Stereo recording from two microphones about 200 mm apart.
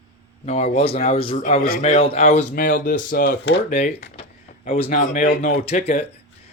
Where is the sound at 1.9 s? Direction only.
30° left (ahead or behind).